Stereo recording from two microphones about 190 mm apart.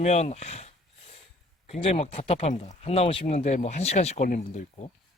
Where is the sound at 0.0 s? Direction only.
35° left (ahead or behind).